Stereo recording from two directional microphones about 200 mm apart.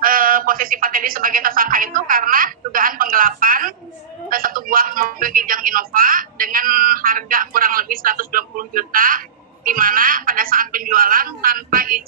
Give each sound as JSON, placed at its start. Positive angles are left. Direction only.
{"t": 0.0, "sound": "speech", "side_deg": -45}